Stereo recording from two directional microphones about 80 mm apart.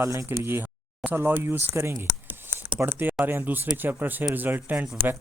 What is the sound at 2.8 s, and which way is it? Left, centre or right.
Speech, right.